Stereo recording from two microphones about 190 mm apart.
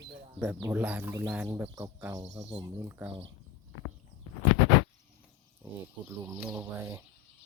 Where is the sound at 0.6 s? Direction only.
10° right (ahead or behind).